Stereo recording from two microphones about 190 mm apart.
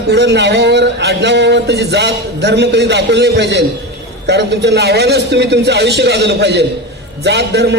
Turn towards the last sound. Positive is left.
turn(degrees=-60)  # may be behind; listen again after turning